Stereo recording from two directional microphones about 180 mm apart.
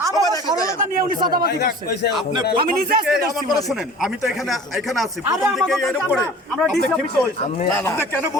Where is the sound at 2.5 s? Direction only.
55° right (ahead or behind).